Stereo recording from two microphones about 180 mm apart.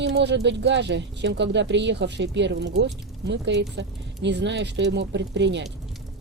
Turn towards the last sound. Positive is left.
turn(degrees=-80)